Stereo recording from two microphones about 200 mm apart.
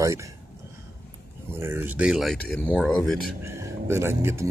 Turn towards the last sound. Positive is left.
turn(degrees=-15)  # may be behind; listen again after turning